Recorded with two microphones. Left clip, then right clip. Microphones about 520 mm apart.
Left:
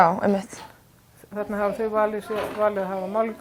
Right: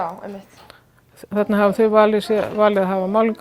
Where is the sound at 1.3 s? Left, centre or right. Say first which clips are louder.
Right 8 dB; right.